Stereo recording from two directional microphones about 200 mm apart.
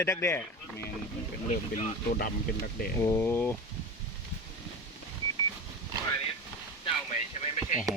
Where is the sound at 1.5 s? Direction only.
35° left (ahead or behind).